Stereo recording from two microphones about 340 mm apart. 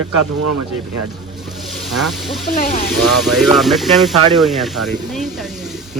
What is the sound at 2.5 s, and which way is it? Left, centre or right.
Speech, left.